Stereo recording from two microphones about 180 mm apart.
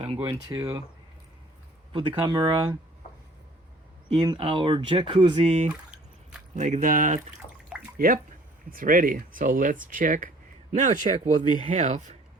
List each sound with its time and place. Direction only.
0.0 s speech: 25° right (ahead or behind)
1.9 s speech: 25° right (ahead or behind)
4.1 s speech: 25° right (ahead or behind); by 7.2 s 45° right (ahead or behind)
7.4 s bathtub: 25° left (ahead or behind)
7.9 s speech: 55° right (ahead or behind)